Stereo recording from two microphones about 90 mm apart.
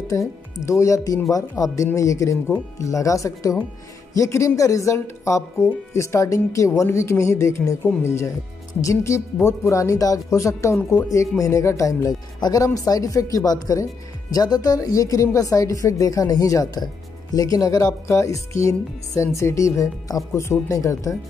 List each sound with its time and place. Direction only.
0.1 s a woman's voice: 35° left (ahead or behind)